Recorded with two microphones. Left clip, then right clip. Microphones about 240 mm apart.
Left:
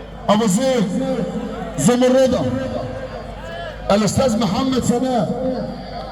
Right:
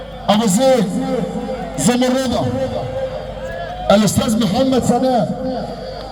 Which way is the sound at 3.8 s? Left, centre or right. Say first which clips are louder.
Right 2 dB; right.